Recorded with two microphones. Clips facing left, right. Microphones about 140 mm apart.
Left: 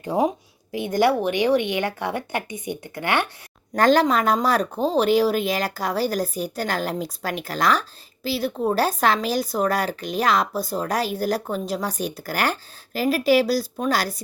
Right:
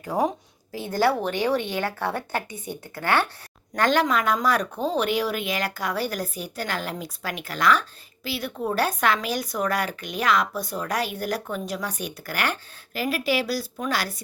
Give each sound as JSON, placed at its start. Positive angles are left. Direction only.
{"t": 0.0, "sound": "a woman's voice", "side_deg": 25}
{"t": 3.8, "sound": "speech", "side_deg": 35}